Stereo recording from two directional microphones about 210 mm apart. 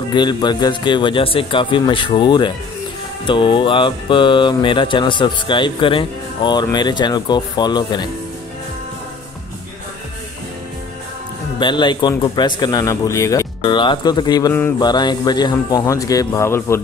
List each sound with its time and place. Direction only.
0.1 s speech: 20° left (ahead or behind)
11.6 s speech: 20° left (ahead or behind)